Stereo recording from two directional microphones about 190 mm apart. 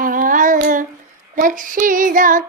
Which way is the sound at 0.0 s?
45° right (ahead or behind).